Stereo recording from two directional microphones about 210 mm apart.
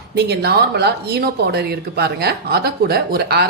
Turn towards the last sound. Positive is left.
turn(degrees=-50)  # may be behind; listen again after turning